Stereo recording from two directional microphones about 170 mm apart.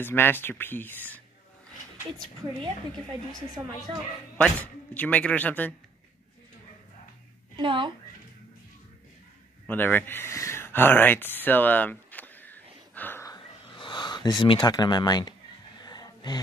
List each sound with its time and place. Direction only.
0.0 s speech: 10° left (ahead or behind)
4.4 s speech: 10° left (ahead or behind)
7.5 s speech: 30° right (ahead or behind)
9.7 s speech: 10° left (ahead or behind)
12.9 s a sound: 10° left (ahead or behind)
13.7 s speech: 30° left (ahead or behind)
15.8 s music: 25° left (ahead or behind)